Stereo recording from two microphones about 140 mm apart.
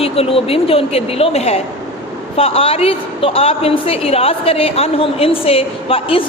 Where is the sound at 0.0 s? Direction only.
45° left (ahead or behind).